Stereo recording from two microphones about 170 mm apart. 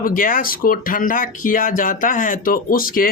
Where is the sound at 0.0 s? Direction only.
55° left (ahead or behind).